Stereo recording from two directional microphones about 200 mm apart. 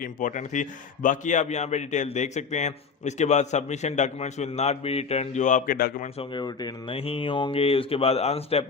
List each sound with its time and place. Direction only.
0.0 s a man's voice: 40° left (ahead or behind)
6.1 s speech: 20° left (ahead or behind)